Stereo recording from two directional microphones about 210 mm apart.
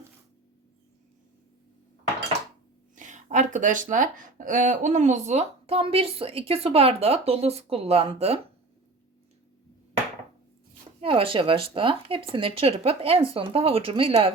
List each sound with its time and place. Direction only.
2.9 s speech: 35° right (ahead or behind)
11.0 s speech: 25° right (ahead or behind)